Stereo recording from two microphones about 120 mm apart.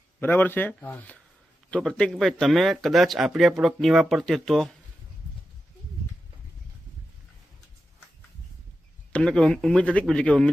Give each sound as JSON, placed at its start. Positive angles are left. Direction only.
{"t": 0.2, "sound": "speech", "side_deg": 15}
{"t": 9.1, "sound": "speech", "side_deg": 5}